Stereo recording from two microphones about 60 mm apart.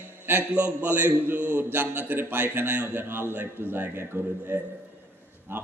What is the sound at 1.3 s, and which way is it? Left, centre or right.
A man's voice, right.